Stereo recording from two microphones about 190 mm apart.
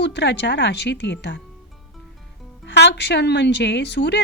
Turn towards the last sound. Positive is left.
turn(degrees=65)  # may be behind; listen again after turning